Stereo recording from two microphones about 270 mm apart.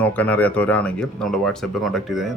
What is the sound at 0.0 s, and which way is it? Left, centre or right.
Speech, centre.